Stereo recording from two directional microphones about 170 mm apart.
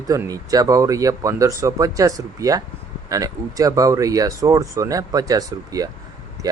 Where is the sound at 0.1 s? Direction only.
20° right (ahead or behind).